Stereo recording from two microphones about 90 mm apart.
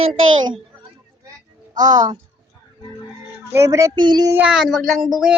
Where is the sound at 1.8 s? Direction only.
45° right (ahead or behind).